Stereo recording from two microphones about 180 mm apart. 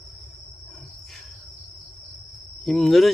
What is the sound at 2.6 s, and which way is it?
Speech, centre (ahead or behind).